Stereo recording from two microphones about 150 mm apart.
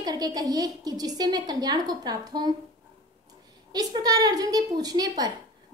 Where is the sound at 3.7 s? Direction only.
25° right (ahead or behind).